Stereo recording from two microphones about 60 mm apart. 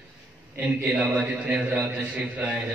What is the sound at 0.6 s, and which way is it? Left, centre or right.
A man's voice, right.